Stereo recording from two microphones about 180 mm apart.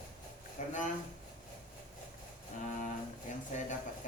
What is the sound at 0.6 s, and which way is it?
Speech, 45° left (ahead or behind).